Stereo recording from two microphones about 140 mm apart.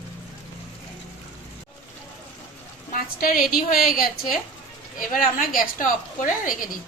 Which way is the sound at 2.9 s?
90° left.